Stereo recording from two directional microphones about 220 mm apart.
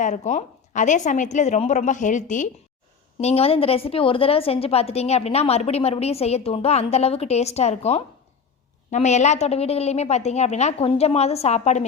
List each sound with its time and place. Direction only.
0.0 s a woman's voice: 35° left (ahead or behind)